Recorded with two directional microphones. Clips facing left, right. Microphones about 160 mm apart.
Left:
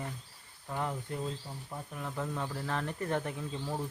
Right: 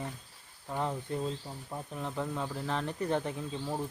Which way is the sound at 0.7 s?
15° right (ahead or behind).